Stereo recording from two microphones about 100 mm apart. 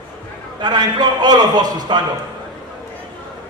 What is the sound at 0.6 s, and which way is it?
A man's voice, 45° right (ahead or behind).